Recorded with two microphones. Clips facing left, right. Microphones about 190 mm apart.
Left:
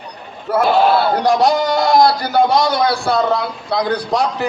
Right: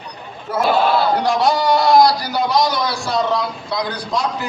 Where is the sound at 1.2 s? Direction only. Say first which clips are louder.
Left 3 dB; 45° left (ahead or behind).